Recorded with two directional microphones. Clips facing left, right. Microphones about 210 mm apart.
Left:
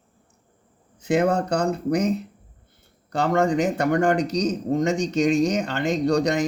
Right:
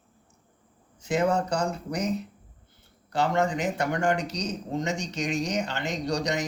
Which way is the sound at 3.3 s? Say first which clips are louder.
Left 5 dB; 50° left (ahead or behind).